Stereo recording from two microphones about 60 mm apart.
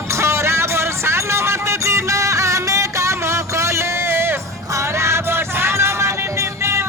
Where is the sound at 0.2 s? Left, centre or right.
Right.